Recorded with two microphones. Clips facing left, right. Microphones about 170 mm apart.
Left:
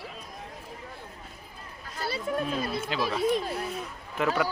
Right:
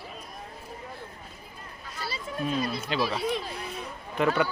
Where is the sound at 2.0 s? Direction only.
55° left (ahead or behind).